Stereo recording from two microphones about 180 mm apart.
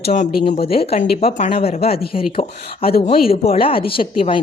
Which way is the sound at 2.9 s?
60° left (ahead or behind).